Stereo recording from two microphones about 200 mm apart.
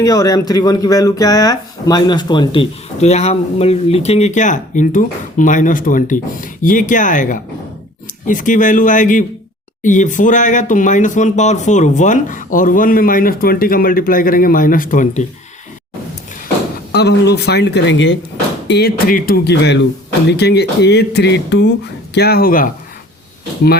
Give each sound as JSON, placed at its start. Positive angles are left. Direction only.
{"t": 0.0, "sound": "speech", "side_deg": 20}
{"t": 16.9, "sound": "speech", "side_deg": 55}
{"t": 18.7, "sound": "speech", "side_deg": 50}